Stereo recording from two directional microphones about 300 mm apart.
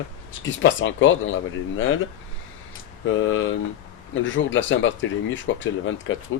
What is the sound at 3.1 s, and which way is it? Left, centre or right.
Speech, left.